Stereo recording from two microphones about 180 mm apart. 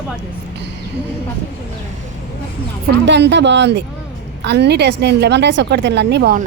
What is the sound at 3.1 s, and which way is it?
A woman's voice, 75° right (ahead or behind).